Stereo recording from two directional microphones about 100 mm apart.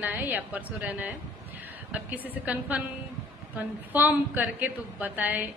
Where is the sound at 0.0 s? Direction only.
15° right (ahead or behind).